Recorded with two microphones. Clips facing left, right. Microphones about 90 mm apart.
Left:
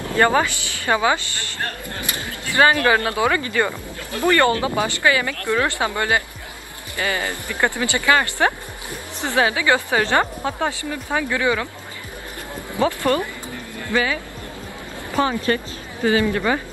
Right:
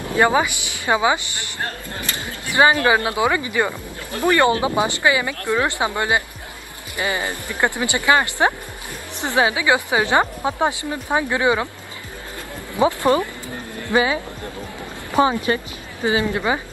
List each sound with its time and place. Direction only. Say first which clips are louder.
0.0 s speech: even; 15° right (ahead or behind)
12.7 s speech: right 3 dB; 20° right (ahead or behind)